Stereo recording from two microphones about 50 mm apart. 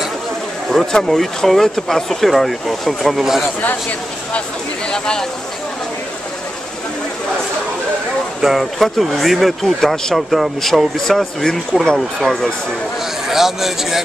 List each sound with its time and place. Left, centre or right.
0.7 s speech: centre
4.9 s speech: centre
8.4 s speech: centre
9.8 s speech: centre
10.1 s speech: centre